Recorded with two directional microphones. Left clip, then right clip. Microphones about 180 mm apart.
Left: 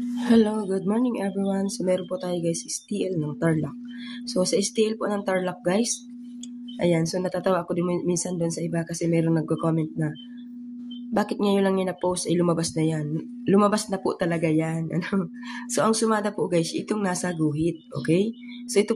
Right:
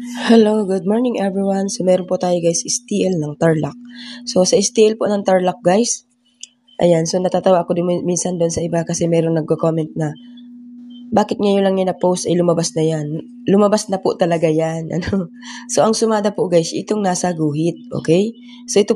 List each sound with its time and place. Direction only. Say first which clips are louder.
0.2 s speech: right 10 dB; 40° right (ahead or behind)
11.1 s speech: right 8 dB; 30° right (ahead or behind)